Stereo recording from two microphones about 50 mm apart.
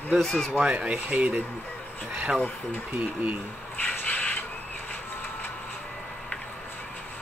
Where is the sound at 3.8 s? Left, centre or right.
Left.